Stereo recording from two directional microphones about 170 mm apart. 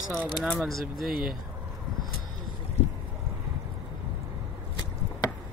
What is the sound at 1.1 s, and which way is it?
Speech, 60° right (ahead or behind).